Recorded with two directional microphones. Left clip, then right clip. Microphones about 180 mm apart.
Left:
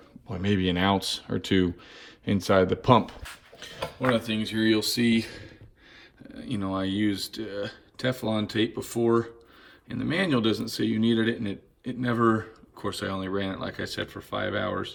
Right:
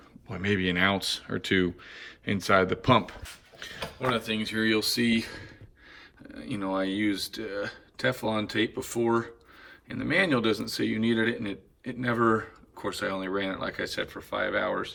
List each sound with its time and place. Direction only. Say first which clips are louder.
0.3 s speech: even; 10° left (ahead or behind)